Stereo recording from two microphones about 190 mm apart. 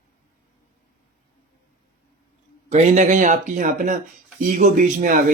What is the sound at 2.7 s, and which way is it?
A man's voice, 40° right (ahead or behind).